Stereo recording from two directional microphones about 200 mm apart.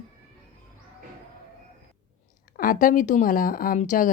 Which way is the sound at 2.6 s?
40° left (ahead or behind).